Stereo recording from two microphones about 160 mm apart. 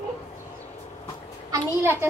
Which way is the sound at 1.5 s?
15° right (ahead or behind).